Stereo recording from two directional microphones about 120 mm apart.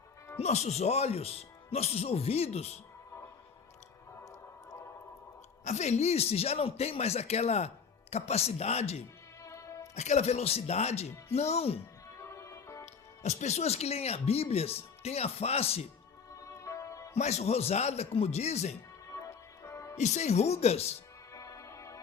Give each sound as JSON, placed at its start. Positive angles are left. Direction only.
{"t": 0.3, "sound": "speech", "side_deg": 65}
{"t": 4.2, "sound": "a sound", "side_deg": 25}
{"t": 5.6, "sound": "speech", "side_deg": 70}
{"t": 9.4, "sound": "music", "side_deg": 25}
{"t": 9.9, "sound": "speech", "side_deg": 70}
{"t": 12.1, "sound": "music", "side_deg": 25}
{"t": 12.8, "sound": "speech", "side_deg": 70}
{"t": 16.3, "sound": "music", "side_deg": 25}
{"t": 17.2, "sound": "speech", "side_deg": 65}
{"t": 19.1, "sound": "music", "side_deg": 25}
{"t": 20.0, "sound": "speech", "side_deg": 70}
{"t": 21.3, "sound": "music", "side_deg": 25}